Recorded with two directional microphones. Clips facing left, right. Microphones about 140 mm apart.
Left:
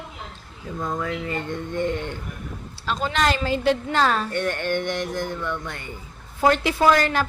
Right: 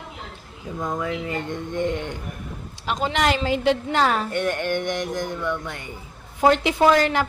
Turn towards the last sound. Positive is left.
turn(degrees=-15)  # may be behind; listen again after turning